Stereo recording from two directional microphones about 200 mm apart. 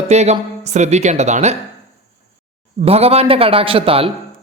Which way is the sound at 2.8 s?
30° right (ahead or behind).